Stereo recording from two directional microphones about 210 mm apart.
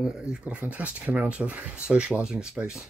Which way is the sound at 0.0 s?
5° right (ahead or behind).